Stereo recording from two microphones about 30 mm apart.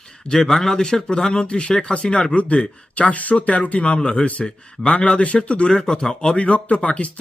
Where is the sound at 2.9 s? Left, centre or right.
Left.